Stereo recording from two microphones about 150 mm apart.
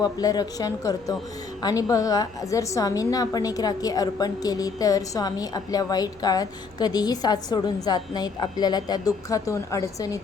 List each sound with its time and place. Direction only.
0.0 s a woman's voice: 25° left (ahead or behind)